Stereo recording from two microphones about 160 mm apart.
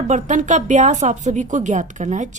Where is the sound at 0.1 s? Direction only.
50° right (ahead or behind).